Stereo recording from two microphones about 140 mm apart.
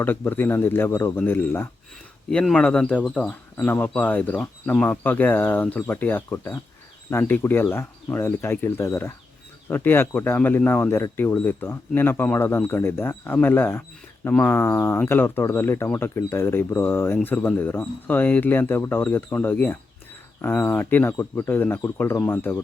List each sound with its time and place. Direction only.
0.0 s speech: 15° left (ahead or behind)